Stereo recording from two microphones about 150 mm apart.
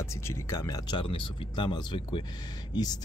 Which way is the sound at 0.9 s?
35° left (ahead or behind).